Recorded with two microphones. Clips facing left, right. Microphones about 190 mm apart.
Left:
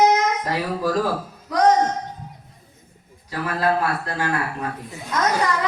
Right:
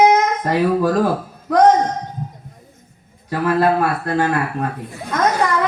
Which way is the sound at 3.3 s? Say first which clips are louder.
Right 6 dB; 55° right (ahead or behind).